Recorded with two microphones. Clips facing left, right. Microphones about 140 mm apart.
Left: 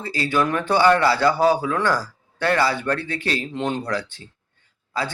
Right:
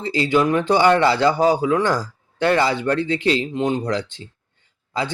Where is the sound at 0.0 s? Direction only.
20° right (ahead or behind).